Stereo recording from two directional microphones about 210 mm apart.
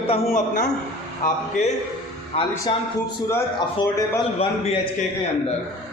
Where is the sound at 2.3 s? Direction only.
30° left (ahead or behind).